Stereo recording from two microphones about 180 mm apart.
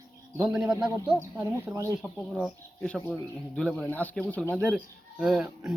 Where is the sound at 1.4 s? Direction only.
20° right (ahead or behind).